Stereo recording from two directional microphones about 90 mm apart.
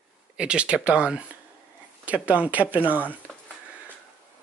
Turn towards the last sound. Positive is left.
turn(degrees=20)  # may be behind; listen again after turning